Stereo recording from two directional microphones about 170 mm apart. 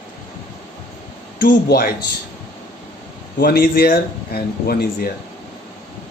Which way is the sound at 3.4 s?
65° left (ahead or behind).